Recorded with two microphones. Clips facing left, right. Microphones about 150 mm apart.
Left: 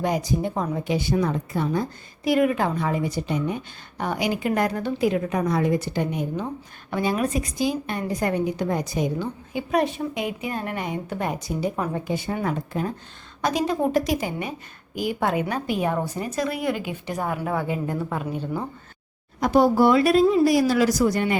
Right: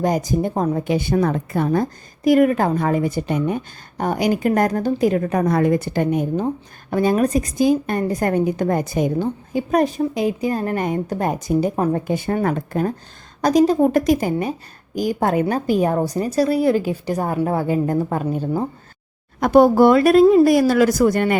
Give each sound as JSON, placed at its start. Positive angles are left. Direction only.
{"t": 0.0, "sound": "a woman's voice", "side_deg": -45}
{"t": 13.4, "sound": "a woman's voice", "side_deg": -40}
{"t": 19.4, "sound": "a woman's voice", "side_deg": -55}